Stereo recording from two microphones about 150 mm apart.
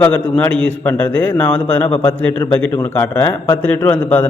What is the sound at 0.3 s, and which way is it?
A man's voice, 10° left (ahead or behind).